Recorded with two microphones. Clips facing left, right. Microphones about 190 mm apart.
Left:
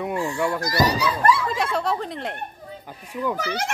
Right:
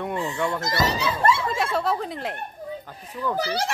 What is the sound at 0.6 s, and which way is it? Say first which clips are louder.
Speech: left 3 dB; 25° right (ahead or behind).